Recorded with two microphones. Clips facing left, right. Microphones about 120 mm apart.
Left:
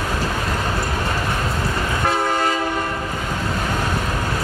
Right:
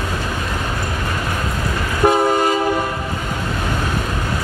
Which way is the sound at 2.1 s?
15° right (ahead or behind).